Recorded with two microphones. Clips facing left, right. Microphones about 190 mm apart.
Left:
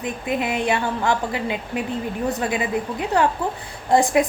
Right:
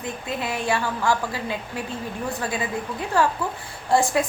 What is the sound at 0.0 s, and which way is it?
A woman's voice, 20° left (ahead or behind).